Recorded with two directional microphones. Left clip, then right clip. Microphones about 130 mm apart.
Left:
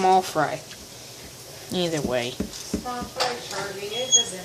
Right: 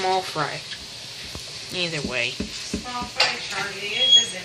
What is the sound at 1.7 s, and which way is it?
Speech, 90° left.